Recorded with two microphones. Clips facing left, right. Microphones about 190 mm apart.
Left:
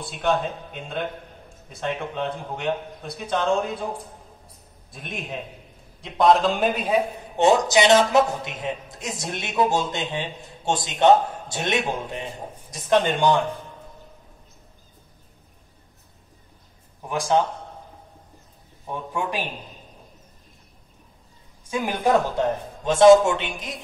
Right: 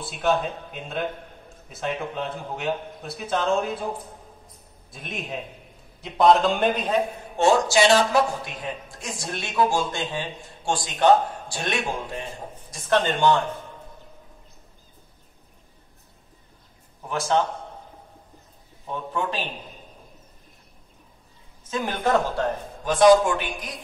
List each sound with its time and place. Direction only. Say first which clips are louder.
0.0 s a man's voice: even; centre (ahead or behind)
4.9 s a man's voice: even; centre (ahead or behind)
7.3 s a man's voice: left 1 dB; 20° left (ahead or behind)
17.0 s speech: left 2 dB; 15° left (ahead or behind)
18.9 s speech: even; 15° left (ahead or behind)
21.6 s a man's voice: left 2 dB; 10° left (ahead or behind)